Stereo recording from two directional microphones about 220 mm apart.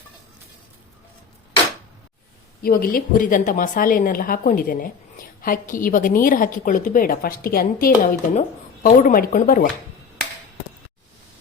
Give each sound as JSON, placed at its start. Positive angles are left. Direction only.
{"t": 2.6, "sound": "a woman's voice", "side_deg": 40}